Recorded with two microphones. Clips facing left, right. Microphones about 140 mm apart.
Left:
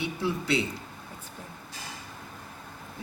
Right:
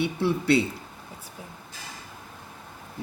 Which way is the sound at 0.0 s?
65° right (ahead or behind).